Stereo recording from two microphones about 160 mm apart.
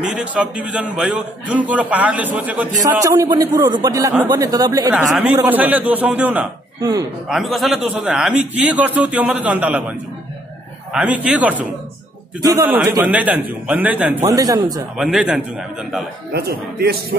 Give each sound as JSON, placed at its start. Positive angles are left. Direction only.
{"t": 0.0, "sound": "a man's voice", "side_deg": -5}
{"t": 5.1, "sound": "a man's voice", "side_deg": -5}
{"t": 6.8, "sound": "a man's voice", "side_deg": -20}
{"t": 7.2, "sound": "a man's voice", "side_deg": 0}
{"t": 12.4, "sound": "a man's voice", "side_deg": -20}
{"t": 13.0, "sound": "a man's voice", "side_deg": -10}
{"t": 14.3, "sound": "a man's voice", "side_deg": -20}
{"t": 15.0, "sound": "a man's voice", "side_deg": -5}
{"t": 16.3, "sound": "speech", "side_deg": -85}